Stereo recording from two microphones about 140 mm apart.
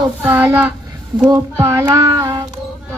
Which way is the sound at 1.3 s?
20° right (ahead or behind).